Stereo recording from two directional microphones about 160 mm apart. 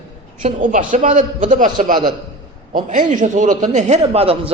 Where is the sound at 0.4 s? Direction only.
55° right (ahead or behind).